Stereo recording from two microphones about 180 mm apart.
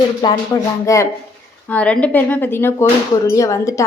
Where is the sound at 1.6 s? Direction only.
5° left (ahead or behind).